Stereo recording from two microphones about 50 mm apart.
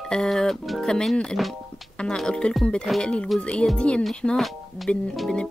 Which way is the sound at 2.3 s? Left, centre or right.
Centre.